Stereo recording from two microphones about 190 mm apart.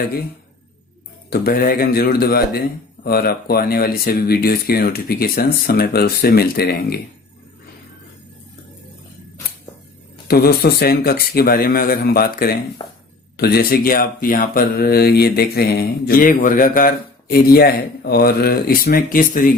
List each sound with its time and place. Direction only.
1.3 s speech: 50° left (ahead or behind)
10.2 s speech: 55° left (ahead or behind)
12.8 s speech: 25° left (ahead or behind)
13.3 s speech: 55° left (ahead or behind)